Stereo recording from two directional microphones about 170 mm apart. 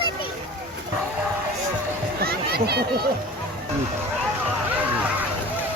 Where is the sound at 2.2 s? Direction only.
70° right (ahead or behind).